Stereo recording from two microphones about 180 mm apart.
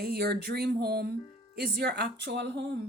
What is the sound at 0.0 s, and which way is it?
A woman's voice, 65° right (ahead or behind).